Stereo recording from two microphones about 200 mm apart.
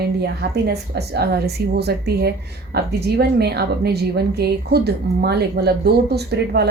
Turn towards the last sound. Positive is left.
turn(degrees=-55)  # may be behind; listen again after turning